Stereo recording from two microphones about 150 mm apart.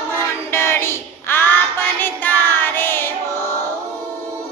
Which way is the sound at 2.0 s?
15° left (ahead or behind).